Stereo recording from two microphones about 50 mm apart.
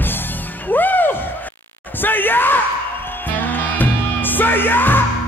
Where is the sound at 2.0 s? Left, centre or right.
Left.